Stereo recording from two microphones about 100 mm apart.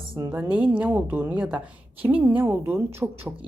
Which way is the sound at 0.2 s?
20° right (ahead or behind).